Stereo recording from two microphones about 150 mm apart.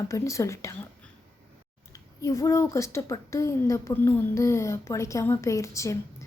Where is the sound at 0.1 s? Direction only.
20° left (ahead or behind).